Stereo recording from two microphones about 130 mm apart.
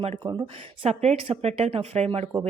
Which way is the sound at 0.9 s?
50° right (ahead or behind).